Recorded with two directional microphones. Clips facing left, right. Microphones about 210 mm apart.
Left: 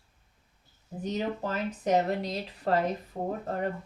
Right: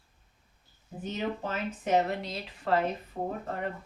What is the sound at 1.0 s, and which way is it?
A woman's voice, 40° left (ahead or behind).